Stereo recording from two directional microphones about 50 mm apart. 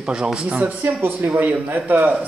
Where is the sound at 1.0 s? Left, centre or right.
Right.